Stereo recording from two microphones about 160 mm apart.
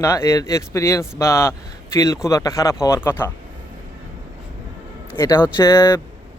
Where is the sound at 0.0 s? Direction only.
15° left (ahead or behind).